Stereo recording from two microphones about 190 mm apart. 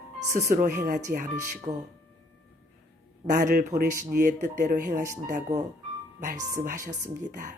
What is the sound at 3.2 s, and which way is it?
Speech, 40° right (ahead or behind).